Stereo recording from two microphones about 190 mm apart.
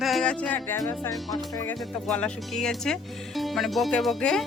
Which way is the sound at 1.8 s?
5° left (ahead or behind).